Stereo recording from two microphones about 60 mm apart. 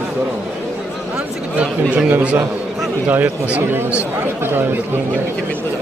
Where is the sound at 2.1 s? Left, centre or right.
Right.